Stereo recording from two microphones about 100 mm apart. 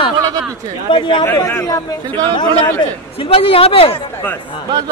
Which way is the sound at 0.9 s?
55° left (ahead or behind).